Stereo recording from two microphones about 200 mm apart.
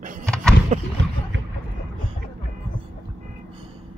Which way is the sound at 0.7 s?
35° right (ahead or behind).